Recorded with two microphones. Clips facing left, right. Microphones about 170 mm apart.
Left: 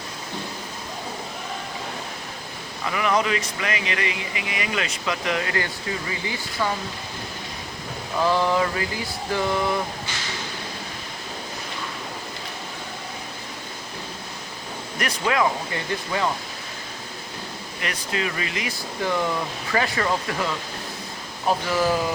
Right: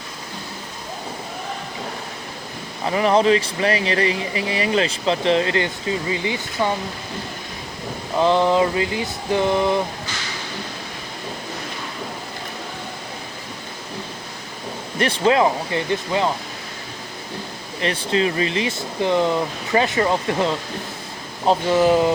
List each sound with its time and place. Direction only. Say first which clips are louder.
2.8 s speech: right 6 dB; 35° right (ahead or behind)
8.2 s speech: right 5 dB; 20° right (ahead or behind)
14.9 s speech: right 6 dB; 30° right (ahead or behind)
17.7 s speech: right 8 dB; 30° right (ahead or behind)